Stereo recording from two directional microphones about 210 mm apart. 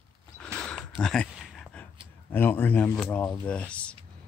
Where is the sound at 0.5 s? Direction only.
5° left (ahead or behind).